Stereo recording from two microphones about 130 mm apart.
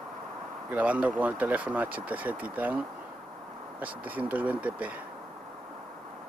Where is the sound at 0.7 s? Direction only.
10° right (ahead or behind).